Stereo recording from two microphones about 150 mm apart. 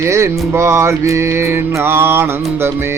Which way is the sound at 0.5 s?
20° right (ahead or behind).